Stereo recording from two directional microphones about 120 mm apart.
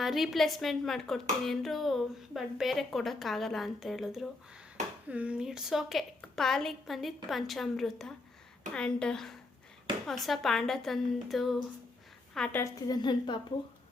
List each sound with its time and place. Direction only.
0.0 s a woman's voice: centre (ahead or behind)
12.9 s a woman's voice: 40° left (ahead or behind)